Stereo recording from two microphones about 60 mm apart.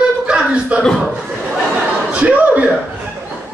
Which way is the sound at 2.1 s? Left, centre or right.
Right.